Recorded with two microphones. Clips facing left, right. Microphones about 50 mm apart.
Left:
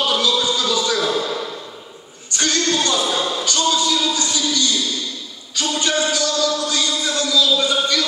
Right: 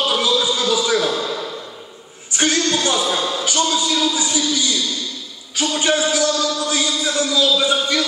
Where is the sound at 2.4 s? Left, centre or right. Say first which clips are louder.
Right 1 dB; centre.